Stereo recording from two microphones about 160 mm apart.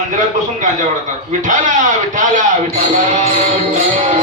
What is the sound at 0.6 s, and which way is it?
A man's voice, 50° right (ahead or behind).